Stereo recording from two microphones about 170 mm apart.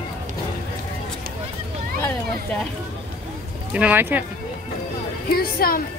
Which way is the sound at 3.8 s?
10° right (ahead or behind).